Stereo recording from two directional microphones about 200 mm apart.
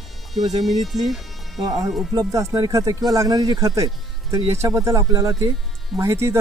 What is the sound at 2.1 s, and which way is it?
Speech, 15° right (ahead or behind).